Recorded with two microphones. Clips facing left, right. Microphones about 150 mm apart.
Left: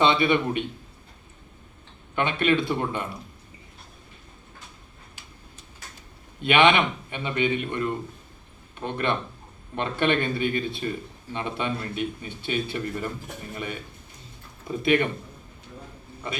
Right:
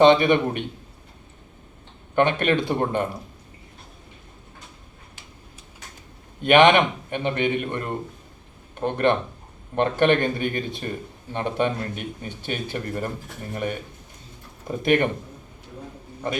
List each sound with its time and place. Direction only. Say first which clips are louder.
0.0 s speech: right 6 dB; 45° right (ahead or behind)
2.1 s speech: right 3 dB; 45° right (ahead or behind)
6.4 s speech: right 4 dB; 45° right (ahead or behind)